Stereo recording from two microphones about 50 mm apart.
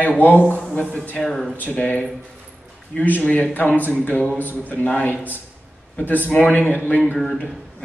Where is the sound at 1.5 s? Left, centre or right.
Left.